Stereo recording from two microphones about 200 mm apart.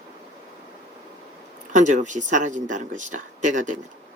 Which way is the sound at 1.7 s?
40° right (ahead or behind).